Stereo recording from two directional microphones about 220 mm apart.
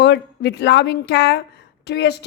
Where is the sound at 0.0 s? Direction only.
50° left (ahead or behind).